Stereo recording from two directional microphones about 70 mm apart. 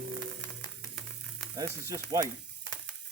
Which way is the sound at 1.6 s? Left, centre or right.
Right.